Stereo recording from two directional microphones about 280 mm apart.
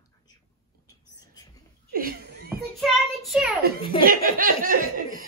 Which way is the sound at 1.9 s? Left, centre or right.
Right.